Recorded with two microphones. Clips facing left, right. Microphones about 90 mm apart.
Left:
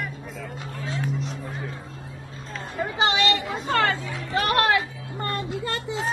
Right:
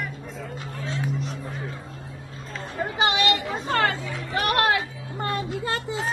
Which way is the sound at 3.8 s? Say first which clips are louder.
Even; 25° left (ahead or behind).